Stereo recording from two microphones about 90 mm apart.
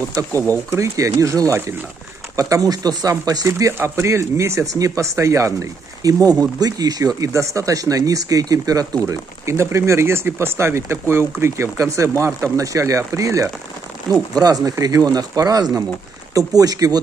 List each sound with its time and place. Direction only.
0.2 s speech: 40° right (ahead or behind)